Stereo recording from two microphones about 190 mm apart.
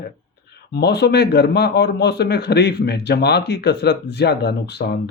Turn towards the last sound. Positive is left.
turn(degrees=60)  # may be behind; listen again after turning